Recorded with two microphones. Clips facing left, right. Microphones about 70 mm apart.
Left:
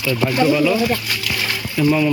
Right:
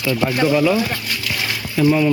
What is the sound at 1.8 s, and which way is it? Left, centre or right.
Speech, centre.